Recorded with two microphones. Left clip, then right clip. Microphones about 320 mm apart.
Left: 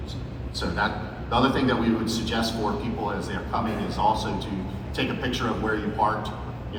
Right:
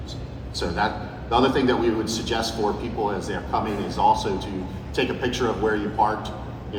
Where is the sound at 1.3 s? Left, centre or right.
Right.